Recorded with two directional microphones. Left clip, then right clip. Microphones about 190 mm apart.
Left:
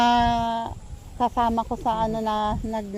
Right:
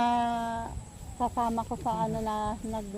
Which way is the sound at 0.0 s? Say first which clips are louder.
Left 8 dB; 45° left (ahead or behind).